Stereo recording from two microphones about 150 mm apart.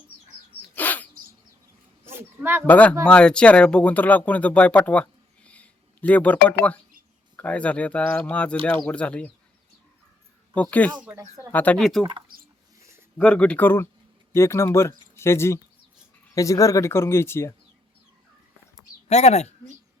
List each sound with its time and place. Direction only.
0.8 s bird: 10° left (ahead or behind)
2.0 s speech: 15° right (ahead or behind)
2.6 s speech: 10° left (ahead or behind)
10.5 s speech: 10° left (ahead or behind)
11.0 s speech: 15° right (ahead or behind)
11.5 s speech: 10° left (ahead or behind)
13.1 s speech: 10° left (ahead or behind)
19.0 s speech: 45° left (ahead or behind)